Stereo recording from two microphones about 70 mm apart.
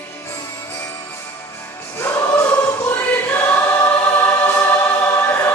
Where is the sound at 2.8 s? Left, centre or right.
Left.